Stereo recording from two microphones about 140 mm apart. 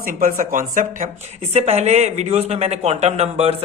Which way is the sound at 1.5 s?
50° right (ahead or behind).